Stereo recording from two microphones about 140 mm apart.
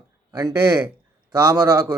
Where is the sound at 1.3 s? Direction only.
25° right (ahead or behind).